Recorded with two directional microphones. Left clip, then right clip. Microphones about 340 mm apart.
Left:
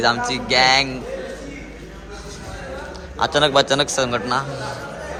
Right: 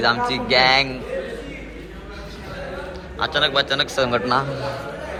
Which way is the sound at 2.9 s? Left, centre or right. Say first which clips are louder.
Left 3 dB; centre.